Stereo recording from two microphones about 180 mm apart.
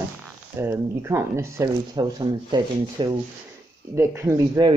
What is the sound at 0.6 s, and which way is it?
Speech, 15° right (ahead or behind).